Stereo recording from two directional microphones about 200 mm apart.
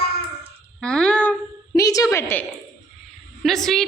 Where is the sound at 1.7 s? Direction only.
15° left (ahead or behind).